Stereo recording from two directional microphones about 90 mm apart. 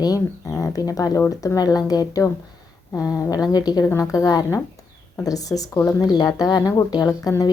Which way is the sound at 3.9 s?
35° left (ahead or behind).